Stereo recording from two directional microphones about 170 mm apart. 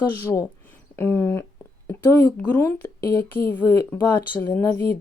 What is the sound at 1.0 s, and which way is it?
Speech, 15° left (ahead or behind).